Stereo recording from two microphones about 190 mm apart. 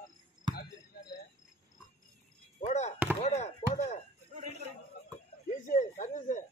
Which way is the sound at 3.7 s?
40° left (ahead or behind).